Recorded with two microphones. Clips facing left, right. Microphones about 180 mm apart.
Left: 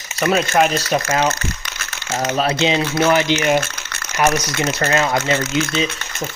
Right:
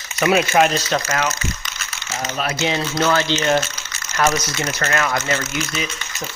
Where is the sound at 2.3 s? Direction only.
30° left (ahead or behind).